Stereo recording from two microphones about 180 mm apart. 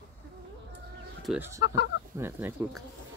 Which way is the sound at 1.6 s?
70° left (ahead or behind).